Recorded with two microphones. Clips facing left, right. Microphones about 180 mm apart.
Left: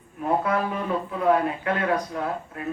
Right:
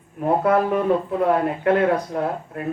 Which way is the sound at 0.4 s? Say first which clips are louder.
Right 7 dB; 55° right (ahead or behind).